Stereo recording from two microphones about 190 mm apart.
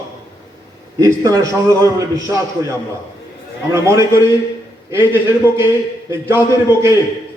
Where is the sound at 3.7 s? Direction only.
15° right (ahead or behind).